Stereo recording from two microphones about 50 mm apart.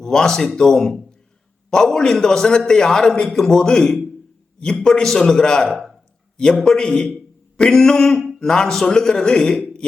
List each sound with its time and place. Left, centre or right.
0.0 s a man's voice: centre